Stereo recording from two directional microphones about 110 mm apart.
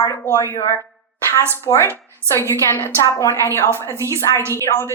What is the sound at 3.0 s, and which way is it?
A woman's voice, 25° left (ahead or behind).